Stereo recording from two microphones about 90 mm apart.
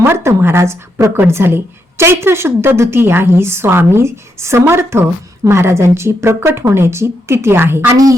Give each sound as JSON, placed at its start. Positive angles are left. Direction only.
{"t": 0.0, "sound": "a woman's voice", "side_deg": -30}